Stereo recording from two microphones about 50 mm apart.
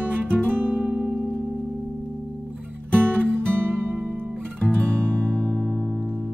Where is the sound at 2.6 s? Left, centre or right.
Right.